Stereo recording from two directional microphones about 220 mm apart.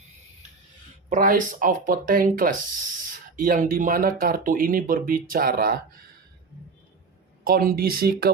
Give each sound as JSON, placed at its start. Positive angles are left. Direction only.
{"t": 1.1, "sound": "speech", "side_deg": -40}
{"t": 7.4, "sound": "speech", "side_deg": -40}